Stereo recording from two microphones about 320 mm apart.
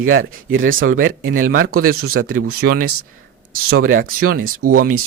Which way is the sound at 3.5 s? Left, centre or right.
Right.